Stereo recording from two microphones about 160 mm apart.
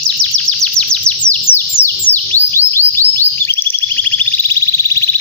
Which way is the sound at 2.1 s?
15° left (ahead or behind).